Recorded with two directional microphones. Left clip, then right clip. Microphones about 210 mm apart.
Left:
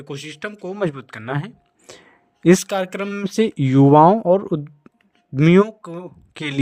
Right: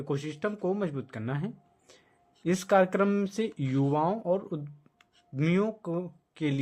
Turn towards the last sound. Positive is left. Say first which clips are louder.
# left 5 dB
turn(degrees=50)  # may be behind; listen again after turning